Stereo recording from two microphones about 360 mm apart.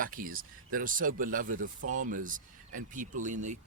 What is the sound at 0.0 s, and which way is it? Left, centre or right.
Speech, right.